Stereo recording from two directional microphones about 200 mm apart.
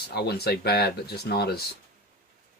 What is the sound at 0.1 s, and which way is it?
Speech, 55° left (ahead or behind).